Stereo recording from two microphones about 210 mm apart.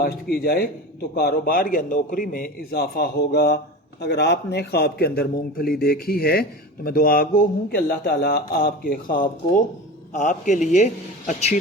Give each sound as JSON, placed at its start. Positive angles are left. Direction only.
{"t": 0.0, "sound": "a man's voice", "side_deg": 45}